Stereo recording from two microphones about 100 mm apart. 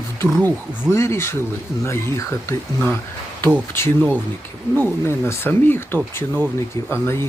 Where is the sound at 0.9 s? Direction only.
25° left (ahead or behind).